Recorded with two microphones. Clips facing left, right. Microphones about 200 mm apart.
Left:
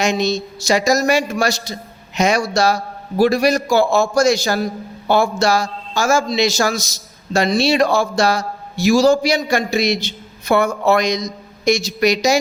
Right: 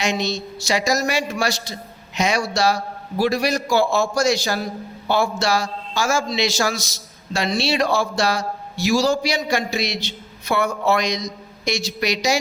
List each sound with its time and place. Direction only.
0.0 s a man's voice: 45° left (ahead or behind)